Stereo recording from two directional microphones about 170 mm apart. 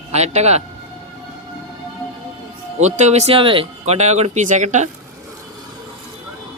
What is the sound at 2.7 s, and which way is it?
Speech, 45° right (ahead or behind).